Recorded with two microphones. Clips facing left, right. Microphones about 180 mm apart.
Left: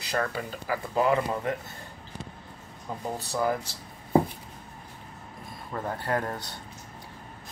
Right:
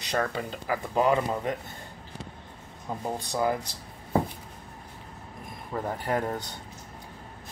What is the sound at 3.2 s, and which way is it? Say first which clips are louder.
Speech: even; 15° right (ahead or behind).